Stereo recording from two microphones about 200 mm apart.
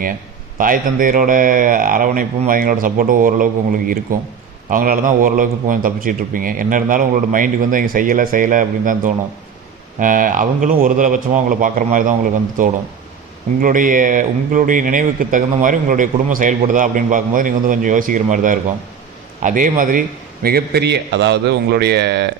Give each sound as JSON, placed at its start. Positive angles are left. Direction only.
{"t": 0.6, "sound": "a man's voice", "side_deg": -45}
{"t": 13.6, "sound": "a man's voice", "side_deg": -45}